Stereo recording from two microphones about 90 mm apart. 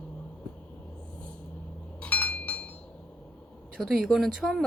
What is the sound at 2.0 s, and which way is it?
Chink, 15° left (ahead or behind).